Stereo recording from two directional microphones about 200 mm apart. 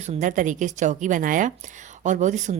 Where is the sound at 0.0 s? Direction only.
35° right (ahead or behind).